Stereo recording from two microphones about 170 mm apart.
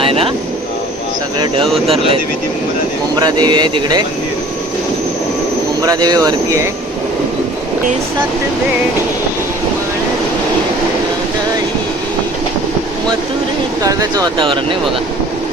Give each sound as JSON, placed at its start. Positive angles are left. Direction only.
{"t": 0.0, "sound": "vehicle", "side_deg": -35}
{"t": 3.2, "sound": "speech", "side_deg": -25}
{"t": 5.8, "sound": "speech", "side_deg": -20}
{"t": 13.8, "sound": "speech", "side_deg": -20}